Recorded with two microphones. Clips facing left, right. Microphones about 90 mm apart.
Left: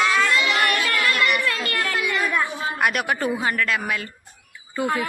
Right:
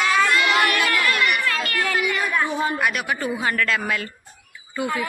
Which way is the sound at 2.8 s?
45° left (ahead or behind).